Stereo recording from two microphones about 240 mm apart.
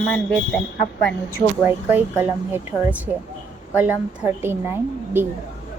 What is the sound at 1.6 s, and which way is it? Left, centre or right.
A woman's voice, centre.